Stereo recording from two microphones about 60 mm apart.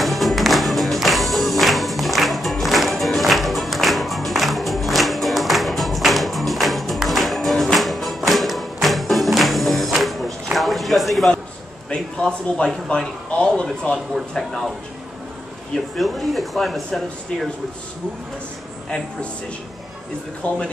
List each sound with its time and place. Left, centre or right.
0.0 s music: centre
11.9 s speech: centre
16.0 s speech: centre
20.4 s speech: centre